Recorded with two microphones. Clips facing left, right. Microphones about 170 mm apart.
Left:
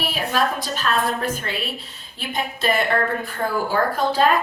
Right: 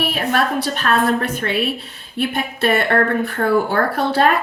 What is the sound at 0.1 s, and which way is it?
A woman's voice, 65° right (ahead or behind).